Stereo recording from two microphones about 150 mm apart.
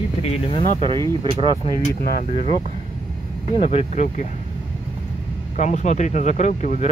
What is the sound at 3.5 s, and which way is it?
Speech, 45° left (ahead or behind).